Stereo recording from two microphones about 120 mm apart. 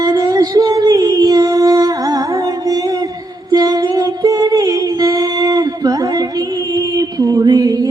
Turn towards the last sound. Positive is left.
turn(degrees=-30)  # may be behind; listen again after turning